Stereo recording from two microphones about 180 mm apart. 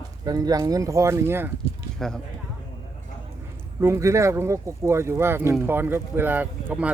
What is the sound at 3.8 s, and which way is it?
Speech, 15° right (ahead or behind).